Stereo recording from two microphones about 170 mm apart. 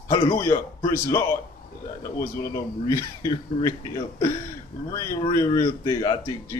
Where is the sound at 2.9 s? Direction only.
20° left (ahead or behind).